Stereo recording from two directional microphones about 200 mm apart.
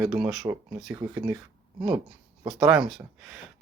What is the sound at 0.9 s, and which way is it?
Speech, 15° right (ahead or behind).